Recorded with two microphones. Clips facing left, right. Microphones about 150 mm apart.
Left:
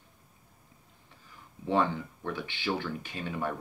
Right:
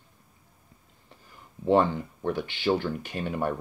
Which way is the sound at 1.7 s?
40° right (ahead or behind).